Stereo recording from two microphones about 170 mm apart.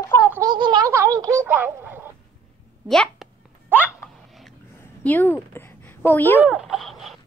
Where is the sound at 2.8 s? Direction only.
Centre (ahead or behind).